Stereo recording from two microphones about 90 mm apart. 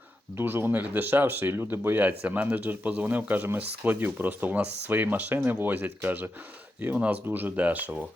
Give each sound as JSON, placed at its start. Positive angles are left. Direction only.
{"t": 0.3, "sound": "speech", "side_deg": -25}